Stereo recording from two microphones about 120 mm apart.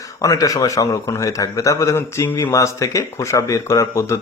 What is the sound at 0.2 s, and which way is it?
A man's voice, 30° left (ahead or behind).